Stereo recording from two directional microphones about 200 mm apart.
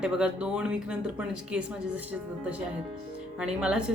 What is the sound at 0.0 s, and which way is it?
Speech, 5° right (ahead or behind).